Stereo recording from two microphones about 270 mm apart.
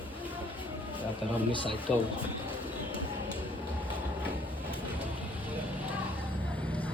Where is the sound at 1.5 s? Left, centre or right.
Centre.